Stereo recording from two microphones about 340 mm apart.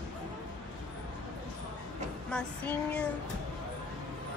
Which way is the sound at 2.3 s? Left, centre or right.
Centre.